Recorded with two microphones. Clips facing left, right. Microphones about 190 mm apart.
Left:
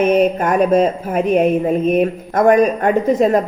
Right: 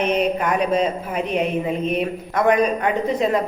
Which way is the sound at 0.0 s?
45° left (ahead or behind).